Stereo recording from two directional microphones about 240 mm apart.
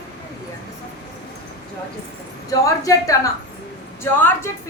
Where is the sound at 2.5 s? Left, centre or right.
Centre.